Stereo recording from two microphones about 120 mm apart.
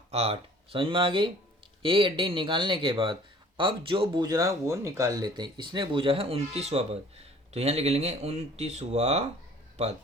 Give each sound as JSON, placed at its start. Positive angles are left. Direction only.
{"t": 0.1, "sound": "speech", "side_deg": -55}